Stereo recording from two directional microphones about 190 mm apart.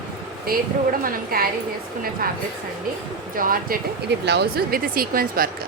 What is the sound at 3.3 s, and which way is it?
Speech, 50° right (ahead or behind).